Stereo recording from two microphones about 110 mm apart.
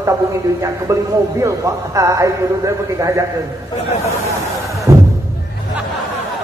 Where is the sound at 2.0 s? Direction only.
30° right (ahead or behind).